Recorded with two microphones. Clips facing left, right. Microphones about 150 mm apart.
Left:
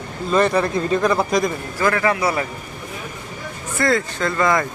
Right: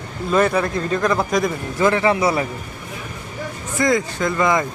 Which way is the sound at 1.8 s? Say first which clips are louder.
Right 2 dB; 25° right (ahead or behind).